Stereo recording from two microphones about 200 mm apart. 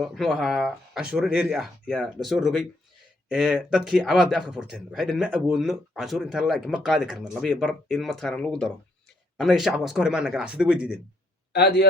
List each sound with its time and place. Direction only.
0.0 s speech: centre (ahead or behind)
11.5 s a man's voice: 55° left (ahead or behind)